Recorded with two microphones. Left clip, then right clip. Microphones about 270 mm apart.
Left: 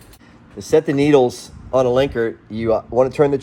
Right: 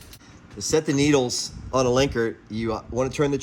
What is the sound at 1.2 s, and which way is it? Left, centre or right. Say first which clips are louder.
Speech: left 8 dB; centre.